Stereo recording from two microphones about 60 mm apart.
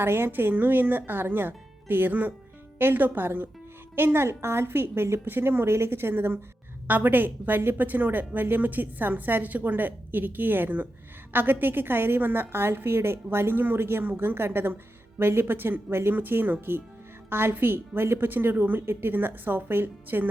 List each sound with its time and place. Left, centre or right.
0.0 s a woman's voice: right